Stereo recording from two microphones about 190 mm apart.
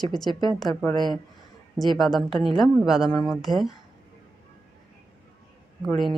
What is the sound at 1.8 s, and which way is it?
A woman's voice, centre (ahead or behind).